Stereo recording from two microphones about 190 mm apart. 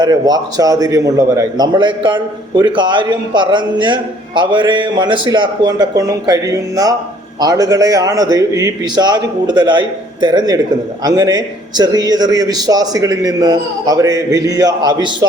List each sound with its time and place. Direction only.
0.0 s a man's voice: 20° right (ahead or behind)